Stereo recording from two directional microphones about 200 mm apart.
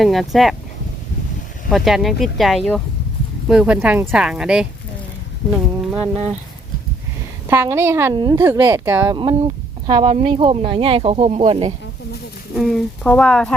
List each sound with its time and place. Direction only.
0.0 s speech: centre (ahead or behind)
1.7 s speech: centre (ahead or behind)
5.5 s a sound: 5° right (ahead or behind)
7.4 s a woman's voice: 10° right (ahead or behind)
9.1 s speech: 25° right (ahead or behind)
12.5 s speech: centre (ahead or behind)